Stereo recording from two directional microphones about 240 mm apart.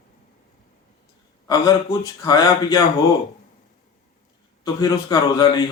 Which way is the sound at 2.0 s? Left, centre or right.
Centre.